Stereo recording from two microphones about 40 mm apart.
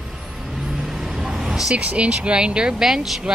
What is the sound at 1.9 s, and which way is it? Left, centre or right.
Speech, right.